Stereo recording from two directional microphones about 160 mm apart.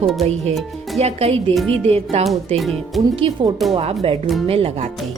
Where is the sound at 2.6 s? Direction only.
Centre (ahead or behind).